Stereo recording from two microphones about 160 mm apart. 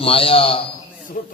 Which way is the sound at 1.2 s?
60° left (ahead or behind).